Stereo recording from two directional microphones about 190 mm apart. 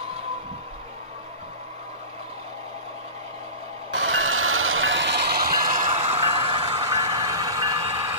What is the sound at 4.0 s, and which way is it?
Train, 90° right.